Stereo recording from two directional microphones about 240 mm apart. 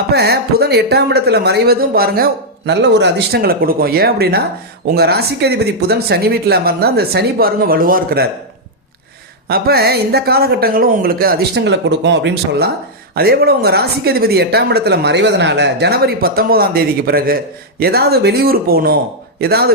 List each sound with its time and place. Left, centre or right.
0.1 s speech: right
9.5 s speech: right